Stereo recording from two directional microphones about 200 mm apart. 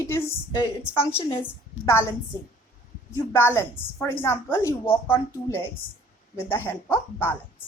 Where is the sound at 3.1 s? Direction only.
10° left (ahead or behind).